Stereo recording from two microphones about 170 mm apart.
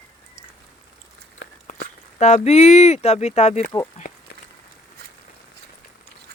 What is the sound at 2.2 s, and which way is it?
Speech, 45° left (ahead or behind).